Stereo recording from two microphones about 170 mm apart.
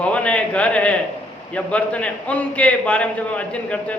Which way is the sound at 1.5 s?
5° left (ahead or behind).